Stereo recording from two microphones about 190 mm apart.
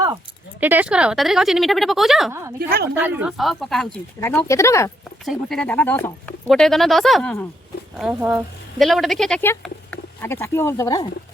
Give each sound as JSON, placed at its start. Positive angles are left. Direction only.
{"t": 0.6, "sound": "speech", "side_deg": -10}
{"t": 2.6, "sound": "a woman's voice", "side_deg": -55}
{"t": 3.0, "sound": "speech", "side_deg": -10}
{"t": 4.2, "sound": "speech", "side_deg": 15}
{"t": 5.2, "sound": "speech", "side_deg": 0}
{"t": 7.9, "sound": "speech", "side_deg": -5}